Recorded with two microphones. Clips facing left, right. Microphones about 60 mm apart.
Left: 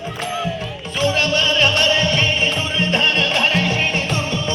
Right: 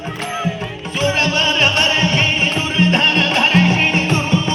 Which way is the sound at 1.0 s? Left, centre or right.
Right.